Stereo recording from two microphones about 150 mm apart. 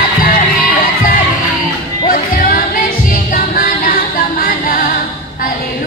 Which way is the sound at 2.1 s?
70° left (ahead or behind).